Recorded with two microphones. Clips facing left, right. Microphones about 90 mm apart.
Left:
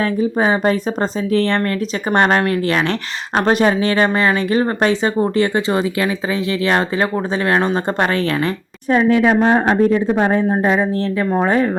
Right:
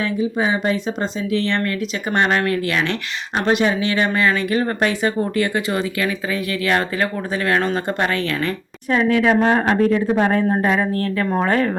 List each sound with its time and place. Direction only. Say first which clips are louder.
0.0 s speech: left 4 dB; 45° left (ahead or behind); by 11.7 s 15° left (ahead or behind)